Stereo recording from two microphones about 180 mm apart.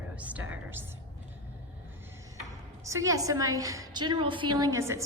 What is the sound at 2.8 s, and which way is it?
A woman's voice, 15° right (ahead or behind).